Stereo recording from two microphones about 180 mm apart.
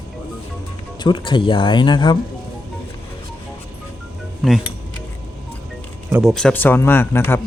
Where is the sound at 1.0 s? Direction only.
25° left (ahead or behind).